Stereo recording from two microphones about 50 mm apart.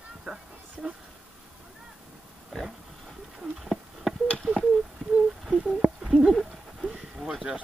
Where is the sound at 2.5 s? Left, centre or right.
Centre.